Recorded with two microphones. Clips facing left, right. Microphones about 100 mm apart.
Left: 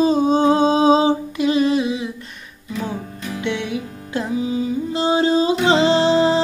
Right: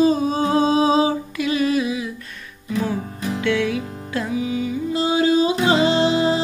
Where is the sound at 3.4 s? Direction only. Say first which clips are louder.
Right 3 dB; 25° left (ahead or behind).